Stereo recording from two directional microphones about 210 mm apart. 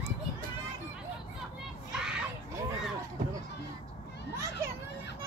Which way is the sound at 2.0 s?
5° right (ahead or behind).